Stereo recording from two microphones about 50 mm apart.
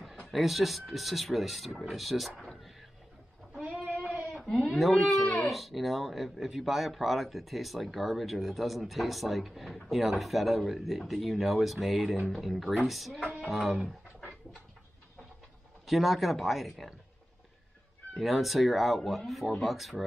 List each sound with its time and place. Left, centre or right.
0.3 s speech: centre
4.1 s sheep: right
4.5 s a sound: centre
4.7 s speech: centre
15.9 s speech: centre
18.1 s speech: centre